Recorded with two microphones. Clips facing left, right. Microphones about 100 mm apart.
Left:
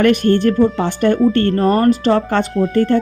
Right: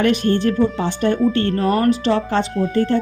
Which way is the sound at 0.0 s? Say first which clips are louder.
Left 4 dB; 55° left (ahead or behind).